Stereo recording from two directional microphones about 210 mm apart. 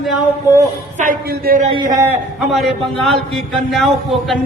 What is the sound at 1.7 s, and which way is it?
Speech, 20° right (ahead or behind).